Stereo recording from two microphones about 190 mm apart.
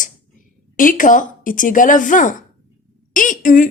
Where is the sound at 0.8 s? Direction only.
45° left (ahead or behind).